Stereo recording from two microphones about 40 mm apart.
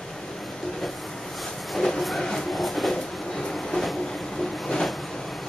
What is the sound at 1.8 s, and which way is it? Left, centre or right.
Train, centre.